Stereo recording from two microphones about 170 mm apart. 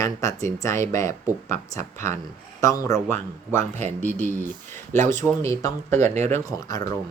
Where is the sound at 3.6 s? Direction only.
40° right (ahead or behind).